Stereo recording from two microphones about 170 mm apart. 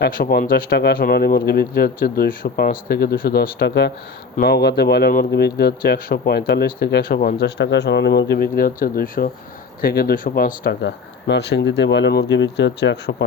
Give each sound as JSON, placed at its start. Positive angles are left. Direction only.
{"t": 0.0, "sound": "speech", "side_deg": 60}
{"t": 7.3, "sound": "speech", "side_deg": 85}